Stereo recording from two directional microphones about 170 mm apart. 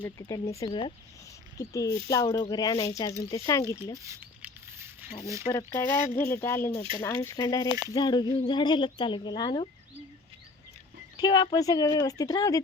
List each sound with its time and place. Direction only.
0.2 s speech: 20° left (ahead or behind)
3.9 s rodents: 15° right (ahead or behind)
5.7 s speech: 15° left (ahead or behind)
11.2 s speech: 25° left (ahead or behind)